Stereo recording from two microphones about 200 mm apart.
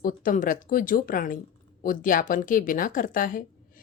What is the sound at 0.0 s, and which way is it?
A woman's voice, 45° left (ahead or behind).